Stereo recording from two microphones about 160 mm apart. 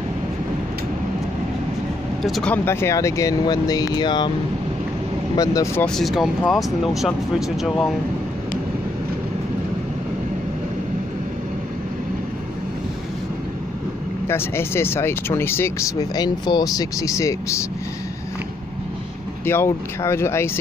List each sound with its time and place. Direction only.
2.2 s speech: centre (ahead or behind)
2.5 s speech: 15° left (ahead or behind)
5.3 s speech: 25° left (ahead or behind)
5.8 s speech: 5° left (ahead or behind)
14.2 s speech: 15° left (ahead or behind)
16.2 s speech: 25° left (ahead or behind)
19.4 s speech: 15° left (ahead or behind)